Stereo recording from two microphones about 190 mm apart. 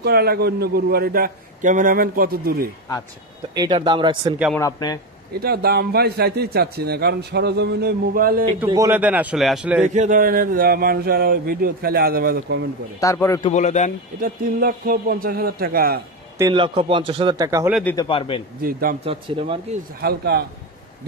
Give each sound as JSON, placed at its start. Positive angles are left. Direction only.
{"t": 0.0, "sound": "speech", "side_deg": -55}
{"t": 3.5, "sound": "a man's voice", "side_deg": -20}
{"t": 4.6, "sound": "a man's voice", "side_deg": 20}
{"t": 5.4, "sound": "a man's voice", "side_deg": -55}
{"t": 8.6, "sound": "a man's voice", "side_deg": -15}
{"t": 9.8, "sound": "speech", "side_deg": -40}
{"t": 13.0, "sound": "a man's voice", "side_deg": 15}
{"t": 13.5, "sound": "a man's voice", "side_deg": 40}
{"t": 14.2, "sound": "speech", "side_deg": -50}
{"t": 16.3, "sound": "a man's voice", "side_deg": -25}
{"t": 17.9, "sound": "a man's voice", "side_deg": 30}
{"t": 18.6, "sound": "speech", "side_deg": -50}
{"t": 19.0, "sound": "a man's voice", "side_deg": -30}
{"t": 20.0, "sound": "a man's voice", "side_deg": -55}